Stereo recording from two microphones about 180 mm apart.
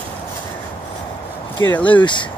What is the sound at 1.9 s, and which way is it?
Speech, 25° left (ahead or behind).